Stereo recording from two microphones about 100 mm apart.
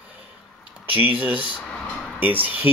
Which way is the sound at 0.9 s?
20° right (ahead or behind).